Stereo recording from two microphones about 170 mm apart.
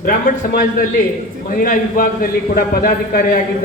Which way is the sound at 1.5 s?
55° left (ahead or behind).